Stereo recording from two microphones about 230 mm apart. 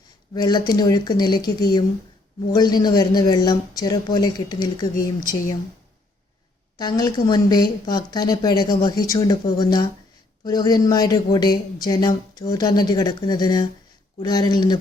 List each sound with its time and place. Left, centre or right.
0.3 s speech: centre
6.7 s speech: centre